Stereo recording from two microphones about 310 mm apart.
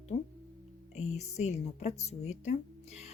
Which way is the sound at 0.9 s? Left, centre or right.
Left.